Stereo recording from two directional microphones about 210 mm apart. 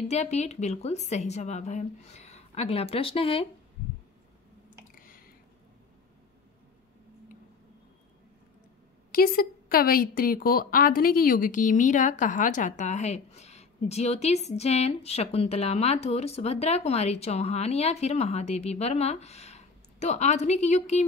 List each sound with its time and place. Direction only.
0.1 s speech: 30° left (ahead or behind)
4.9 s squish: 40° left (ahead or behind)
9.1 s speech: 45° left (ahead or behind)